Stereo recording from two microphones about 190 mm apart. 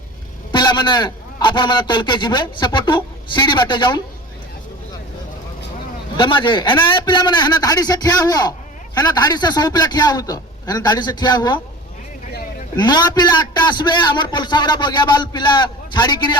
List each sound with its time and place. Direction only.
0.5 s a man's voice: 25° left (ahead or behind)
6.1 s a man's voice: 25° left (ahead or behind)
12.7 s a man's voice: 25° left (ahead or behind)